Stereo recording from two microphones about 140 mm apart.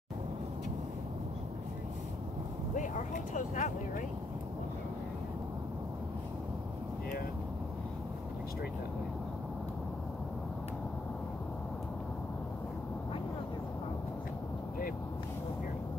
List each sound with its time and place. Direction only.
2.7 s vehicle: 70° left (ahead or behind)